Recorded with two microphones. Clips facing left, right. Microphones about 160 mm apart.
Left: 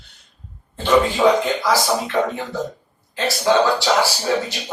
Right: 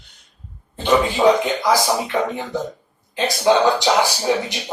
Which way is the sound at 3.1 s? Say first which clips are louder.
Right 1 dB; 20° right (ahead or behind).